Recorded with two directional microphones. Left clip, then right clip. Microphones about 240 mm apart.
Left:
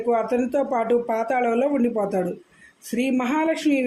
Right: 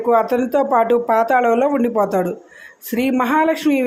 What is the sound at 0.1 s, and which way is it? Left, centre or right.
Speech, centre.